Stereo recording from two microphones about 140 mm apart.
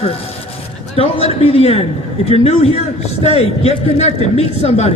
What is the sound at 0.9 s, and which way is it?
A man's voice, 45° left (ahead or behind).